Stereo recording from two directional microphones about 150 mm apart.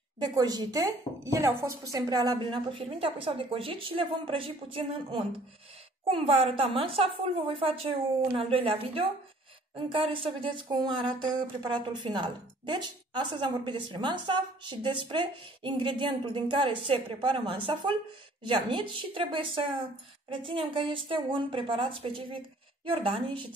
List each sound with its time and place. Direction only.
0.2 s speech: 25° right (ahead or behind)